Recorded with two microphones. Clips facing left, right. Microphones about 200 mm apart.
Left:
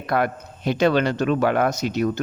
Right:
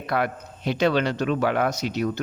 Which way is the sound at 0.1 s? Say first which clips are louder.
Left 3 dB; 45° left (ahead or behind).